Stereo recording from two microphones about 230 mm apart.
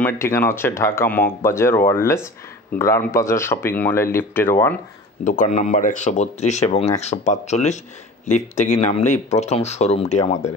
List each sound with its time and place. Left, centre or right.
0.0 s speech: centre
5.2 s speech: left